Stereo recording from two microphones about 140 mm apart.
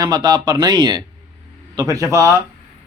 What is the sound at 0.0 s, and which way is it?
A man's voice, 30° right (ahead or behind).